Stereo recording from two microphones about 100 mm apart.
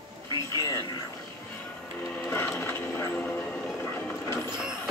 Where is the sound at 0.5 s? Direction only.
35° left (ahead or behind).